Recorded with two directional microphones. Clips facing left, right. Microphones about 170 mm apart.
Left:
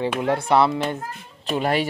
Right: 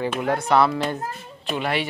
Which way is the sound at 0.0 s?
25° left (ahead or behind).